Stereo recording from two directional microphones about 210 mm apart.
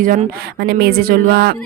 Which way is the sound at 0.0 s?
40° right (ahead or behind).